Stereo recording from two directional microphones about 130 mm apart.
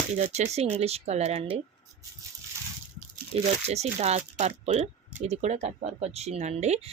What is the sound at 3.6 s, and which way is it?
Speech, 55° right (ahead or behind).